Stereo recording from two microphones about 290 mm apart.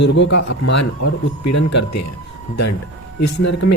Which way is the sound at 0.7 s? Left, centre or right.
Left.